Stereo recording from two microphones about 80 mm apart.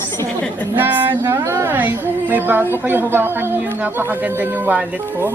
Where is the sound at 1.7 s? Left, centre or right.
Right.